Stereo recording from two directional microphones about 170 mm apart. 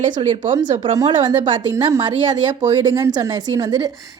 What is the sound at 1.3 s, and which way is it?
A woman's voice, 25° right (ahead or behind).